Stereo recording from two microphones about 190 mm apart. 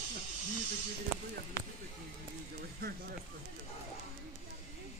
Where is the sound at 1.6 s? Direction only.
15° left (ahead or behind).